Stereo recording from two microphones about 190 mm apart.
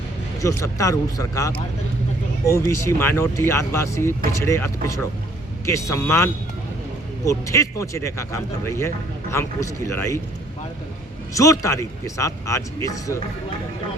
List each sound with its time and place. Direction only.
0.4 s speech: 15° left (ahead or behind)
11.3 s speech: 15° left (ahead or behind)